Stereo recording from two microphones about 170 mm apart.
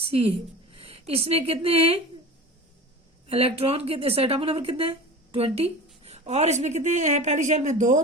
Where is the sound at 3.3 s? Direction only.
35° right (ahead or behind).